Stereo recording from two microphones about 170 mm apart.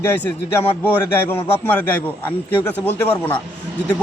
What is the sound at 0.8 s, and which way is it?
A man's voice, 10° left (ahead or behind).